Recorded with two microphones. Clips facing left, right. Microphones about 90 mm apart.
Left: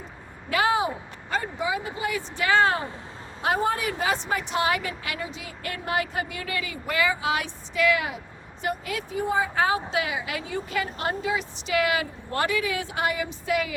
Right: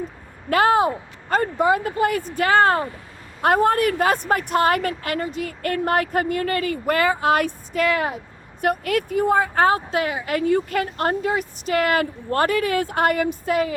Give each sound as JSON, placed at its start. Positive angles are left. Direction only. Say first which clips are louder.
{"t": 0.5, "sound": "a woman's voice", "louder": "right 6 dB", "side_deg": -50}
{"t": 8.6, "sound": "a woman's voice", "louder": "right 8 dB", "side_deg": -55}